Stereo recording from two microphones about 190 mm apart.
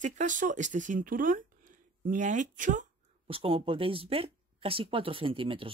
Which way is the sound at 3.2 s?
30° right (ahead or behind).